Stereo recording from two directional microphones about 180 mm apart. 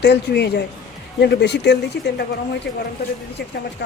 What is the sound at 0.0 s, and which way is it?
Speech, 70° left (ahead or behind).